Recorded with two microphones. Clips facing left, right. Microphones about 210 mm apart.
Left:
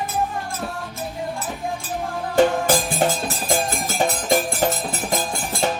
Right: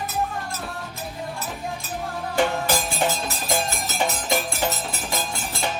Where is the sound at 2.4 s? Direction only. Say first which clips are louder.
Left 6 dB; 50° left (ahead or behind).